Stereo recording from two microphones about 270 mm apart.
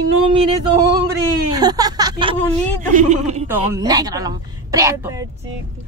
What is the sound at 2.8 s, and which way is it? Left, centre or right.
Speech, right.